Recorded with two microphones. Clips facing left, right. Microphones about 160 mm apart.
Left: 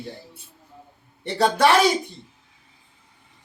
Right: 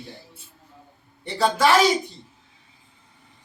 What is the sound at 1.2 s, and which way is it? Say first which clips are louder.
Speech: left 2 dB; 65° left (ahead or behind).